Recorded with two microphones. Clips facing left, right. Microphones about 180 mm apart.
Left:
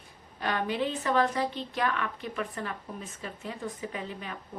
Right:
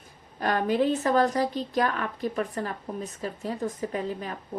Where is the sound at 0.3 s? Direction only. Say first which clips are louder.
Right 6 dB; 45° right (ahead or behind).